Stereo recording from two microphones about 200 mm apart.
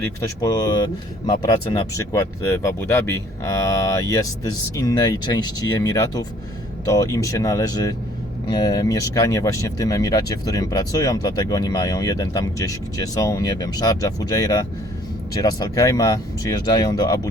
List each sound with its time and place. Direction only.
0.4 s speech: 15° left (ahead or behind)